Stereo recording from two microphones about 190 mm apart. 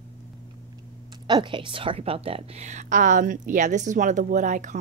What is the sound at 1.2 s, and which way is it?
A woman's voice, 25° right (ahead or behind).